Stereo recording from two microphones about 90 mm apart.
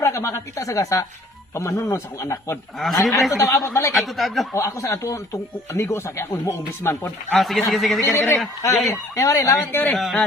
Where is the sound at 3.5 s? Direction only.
35° left (ahead or behind).